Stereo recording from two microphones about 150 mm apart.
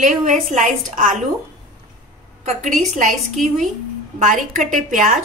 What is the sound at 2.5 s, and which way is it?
Speech, 60° right (ahead or behind).